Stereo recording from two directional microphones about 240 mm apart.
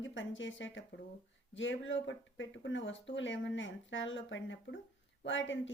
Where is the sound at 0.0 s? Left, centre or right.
Left.